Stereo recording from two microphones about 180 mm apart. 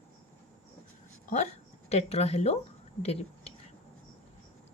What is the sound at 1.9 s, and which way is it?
Speech, 35° left (ahead or behind).